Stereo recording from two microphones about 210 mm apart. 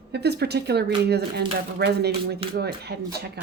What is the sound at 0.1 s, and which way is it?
A woman's voice, 50° right (ahead or behind).